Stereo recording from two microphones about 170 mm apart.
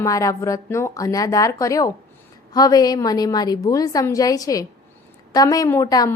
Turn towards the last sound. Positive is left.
turn(degrees=20)  # may be behind; listen again after turning